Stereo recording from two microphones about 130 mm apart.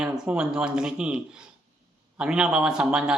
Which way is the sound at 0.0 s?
5° right (ahead or behind).